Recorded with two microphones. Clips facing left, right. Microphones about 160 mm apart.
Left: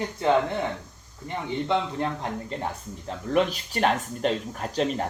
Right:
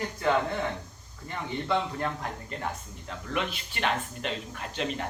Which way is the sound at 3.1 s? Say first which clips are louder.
Left 8 dB; 40° left (ahead or behind).